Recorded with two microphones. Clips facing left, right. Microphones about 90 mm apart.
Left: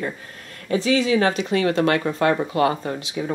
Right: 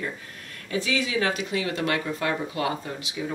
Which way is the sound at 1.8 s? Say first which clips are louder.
Left 7 dB; 45° left (ahead or behind).